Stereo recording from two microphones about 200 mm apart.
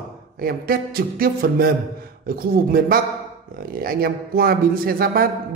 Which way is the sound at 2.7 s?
45° right (ahead or behind).